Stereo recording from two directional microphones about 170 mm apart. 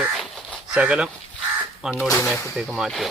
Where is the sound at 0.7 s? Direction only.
5° right (ahead or behind).